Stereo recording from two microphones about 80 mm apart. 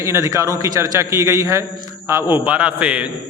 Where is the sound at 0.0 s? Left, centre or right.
Right.